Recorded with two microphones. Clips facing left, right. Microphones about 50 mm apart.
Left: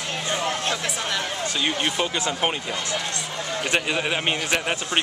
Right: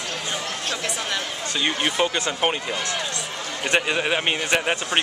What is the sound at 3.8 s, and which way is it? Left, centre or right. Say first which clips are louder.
Speech: right 4 dB; centre.